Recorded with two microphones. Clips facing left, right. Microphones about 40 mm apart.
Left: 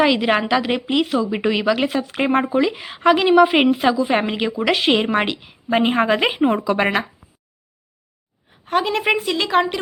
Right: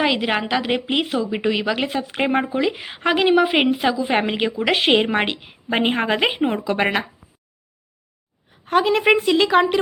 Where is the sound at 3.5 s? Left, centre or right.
Centre.